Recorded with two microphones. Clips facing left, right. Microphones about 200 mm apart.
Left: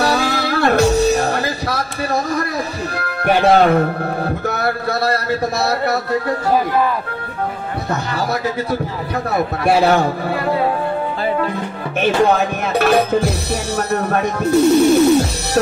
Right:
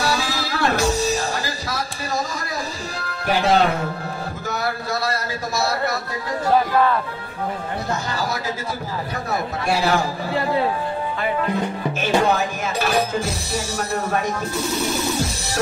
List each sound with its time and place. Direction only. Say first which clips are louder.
0.0 s music: left 6 dB; 60° left (ahead or behind)
3.0 s a man's voice: left 6 dB; 60° left (ahead or behind)
9.7 s music: left 6 dB; 60° left (ahead or behind)
12.0 s music: left 5 dB; 60° left (ahead or behind)
13.7 s speech: left 5 dB; 60° left (ahead or behind)